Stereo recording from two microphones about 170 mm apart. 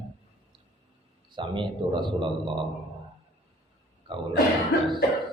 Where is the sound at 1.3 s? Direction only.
30° right (ahead or behind).